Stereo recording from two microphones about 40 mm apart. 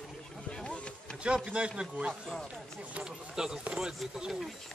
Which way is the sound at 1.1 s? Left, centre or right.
Right.